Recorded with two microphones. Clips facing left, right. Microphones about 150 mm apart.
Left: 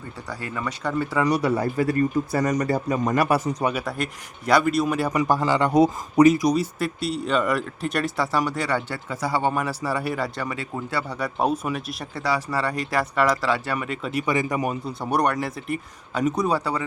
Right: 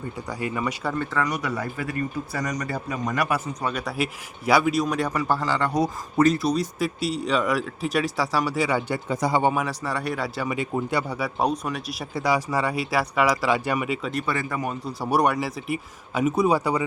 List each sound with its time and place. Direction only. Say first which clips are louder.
0.3 s speech: right 2 dB; 15° right (ahead or behind)
0.9 s a man's voice: left 6 dB; 10° left (ahead or behind)
1.3 s speech: left 6 dB; 30° left (ahead or behind)
2.5 s a man's voice: left 6 dB; 45° left (ahead or behind)
3.6 s a man's voice: left 4 dB; 10° left (ahead or behind)
3.8 s speech: right 1 dB; 5° right (ahead or behind)
5.1 s a man's voice: left 3 dB; 15° left (ahead or behind)
6.2 s a man's voice: left 3 dB; 10° left (ahead or behind); by 9.5 s 20° right (ahead or behind)
9.5 s speech: left 1 dB; centre (ahead or behind); by 11.2 s 15° right (ahead or behind)
11.2 s speech: left 1 dB; centre (ahead or behind)
12.1 s speech: right 2 dB; 15° right (ahead or behind)
14.0 s a man's voice: left 3 dB; 10° left (ahead or behind)
15.0 s speech: right 1 dB; 5° right (ahead or behind)